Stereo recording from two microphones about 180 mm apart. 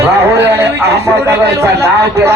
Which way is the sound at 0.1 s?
70° right (ahead or behind).